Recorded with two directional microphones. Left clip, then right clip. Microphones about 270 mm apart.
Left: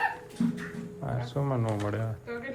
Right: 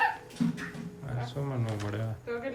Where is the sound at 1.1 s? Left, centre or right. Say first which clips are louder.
Left 5 dB; centre.